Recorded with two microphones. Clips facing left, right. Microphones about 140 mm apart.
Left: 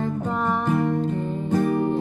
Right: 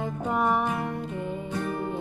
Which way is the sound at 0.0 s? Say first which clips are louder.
Left 2 dB; 10° right (ahead or behind).